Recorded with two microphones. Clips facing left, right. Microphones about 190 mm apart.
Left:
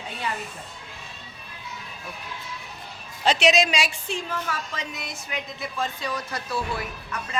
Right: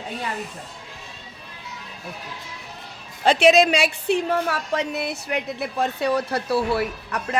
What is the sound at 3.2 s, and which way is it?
A woman's voice, 55° right (ahead or behind).